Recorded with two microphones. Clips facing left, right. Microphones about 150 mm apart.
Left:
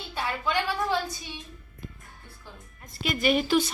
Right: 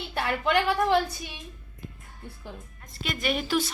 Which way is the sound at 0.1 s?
65° right (ahead or behind).